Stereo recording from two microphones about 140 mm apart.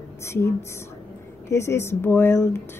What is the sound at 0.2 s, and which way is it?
Speech, 20° left (ahead or behind).